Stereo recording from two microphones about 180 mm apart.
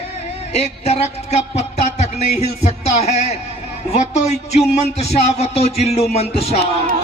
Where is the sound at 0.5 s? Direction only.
35° left (ahead or behind).